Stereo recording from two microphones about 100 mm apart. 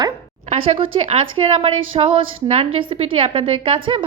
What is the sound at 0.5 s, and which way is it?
A woman's voice, 70° right (ahead or behind).